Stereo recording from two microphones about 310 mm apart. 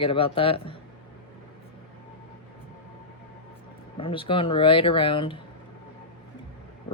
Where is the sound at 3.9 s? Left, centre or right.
Centre.